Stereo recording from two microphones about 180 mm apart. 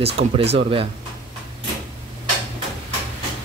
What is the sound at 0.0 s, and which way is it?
Speech, 35° right (ahead or behind).